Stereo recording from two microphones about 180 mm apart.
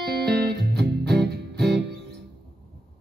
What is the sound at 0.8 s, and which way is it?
Music, centre (ahead or behind).